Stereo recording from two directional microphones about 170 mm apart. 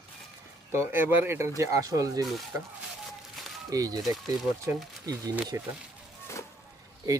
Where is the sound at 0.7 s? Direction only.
15° right (ahead or behind).